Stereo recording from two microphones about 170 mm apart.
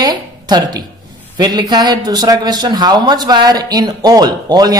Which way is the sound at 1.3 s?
25° right (ahead or behind).